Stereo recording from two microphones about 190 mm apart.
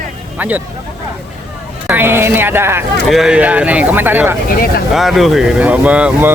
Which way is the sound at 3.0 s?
Centre (ahead or behind).